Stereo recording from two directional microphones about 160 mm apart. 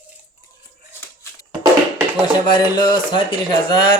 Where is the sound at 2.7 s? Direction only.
30° left (ahead or behind).